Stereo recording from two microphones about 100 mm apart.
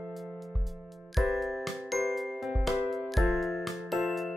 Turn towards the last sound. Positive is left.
turn(degrees=0)  # may be behind; listen again after turning